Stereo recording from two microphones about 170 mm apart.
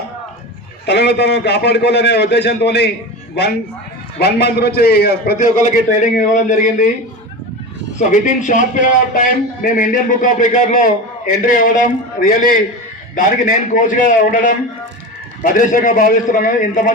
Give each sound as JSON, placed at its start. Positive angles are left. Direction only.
{"t": 0.9, "sound": "a man's voice", "side_deg": 80}
{"t": 4.2, "sound": "a man's voice", "side_deg": 70}
{"t": 5.4, "sound": "a man's voice", "side_deg": 45}
{"t": 7.9, "sound": "a man's voice", "side_deg": 50}